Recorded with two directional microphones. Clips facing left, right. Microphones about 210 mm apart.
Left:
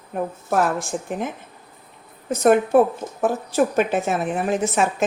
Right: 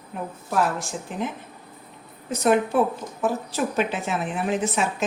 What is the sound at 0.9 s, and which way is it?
Speech, 50° left (ahead or behind).